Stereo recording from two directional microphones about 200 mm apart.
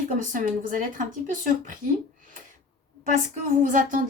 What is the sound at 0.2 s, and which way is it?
Speech, 40° right (ahead or behind).